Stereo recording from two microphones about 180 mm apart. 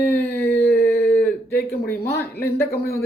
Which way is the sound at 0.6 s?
60° left (ahead or behind).